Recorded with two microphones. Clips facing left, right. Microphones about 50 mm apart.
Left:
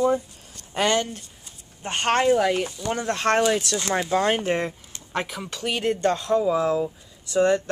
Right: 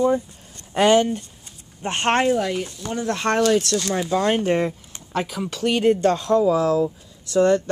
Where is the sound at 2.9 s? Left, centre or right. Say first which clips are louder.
Right 2 dB; left.